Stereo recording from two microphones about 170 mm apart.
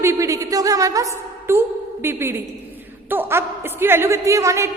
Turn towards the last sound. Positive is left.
turn(degrees=-15)  # may be behind; listen again after turning